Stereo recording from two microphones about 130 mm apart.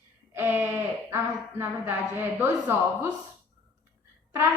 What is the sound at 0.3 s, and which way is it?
Speech, 15° right (ahead or behind).